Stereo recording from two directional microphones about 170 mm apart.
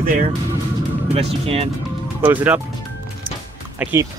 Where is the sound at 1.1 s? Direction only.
35° right (ahead or behind).